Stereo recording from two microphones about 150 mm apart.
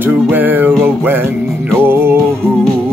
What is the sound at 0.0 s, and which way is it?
Music, 10° right (ahead or behind).